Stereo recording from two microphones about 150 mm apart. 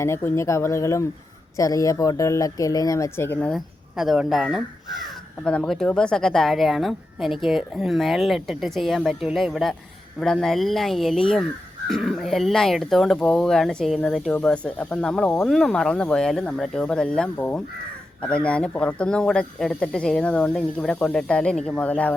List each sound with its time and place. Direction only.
0.0 s speech: 20° left (ahead or behind)
3.9 s speech: 5° right (ahead or behind)